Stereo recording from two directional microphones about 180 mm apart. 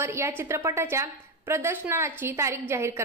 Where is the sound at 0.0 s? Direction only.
15° right (ahead or behind).